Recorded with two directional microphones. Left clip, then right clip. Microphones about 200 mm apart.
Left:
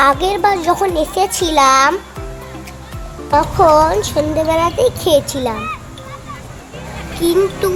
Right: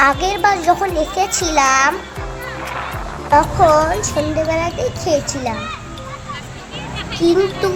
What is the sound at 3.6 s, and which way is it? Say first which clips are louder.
A child's voice: left 2 dB; 20° left (ahead or behind).